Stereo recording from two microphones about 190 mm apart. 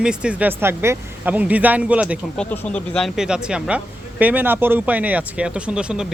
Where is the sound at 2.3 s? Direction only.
5° left (ahead or behind).